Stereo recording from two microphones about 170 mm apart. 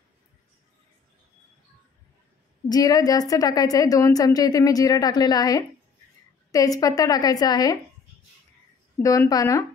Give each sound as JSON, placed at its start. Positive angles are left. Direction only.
{"t": 2.7, "sound": "a woman's voice", "side_deg": 20}
{"t": 9.0, "sound": "a woman's voice", "side_deg": 20}